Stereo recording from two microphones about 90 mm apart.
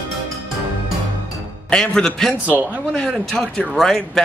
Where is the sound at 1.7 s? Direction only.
10° left (ahead or behind).